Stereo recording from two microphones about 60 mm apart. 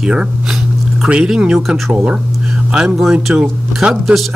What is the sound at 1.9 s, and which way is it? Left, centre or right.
Speech, right.